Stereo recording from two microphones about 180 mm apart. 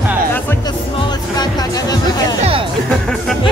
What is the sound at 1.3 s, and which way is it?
Music, 20° left (ahead or behind).